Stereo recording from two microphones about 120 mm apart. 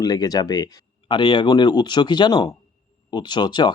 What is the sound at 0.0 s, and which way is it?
Speech, 35° left (ahead or behind).